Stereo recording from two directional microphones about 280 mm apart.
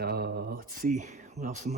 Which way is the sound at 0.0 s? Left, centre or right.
Right.